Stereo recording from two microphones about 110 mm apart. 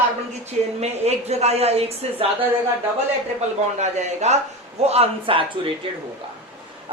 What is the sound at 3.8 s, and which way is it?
Speech, 90° right.